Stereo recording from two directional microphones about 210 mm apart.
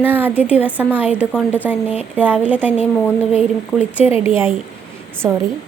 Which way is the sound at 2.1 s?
10° right (ahead or behind).